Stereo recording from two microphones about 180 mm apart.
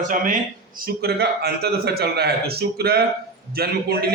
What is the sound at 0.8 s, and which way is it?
A man's voice, 60° right (ahead or behind).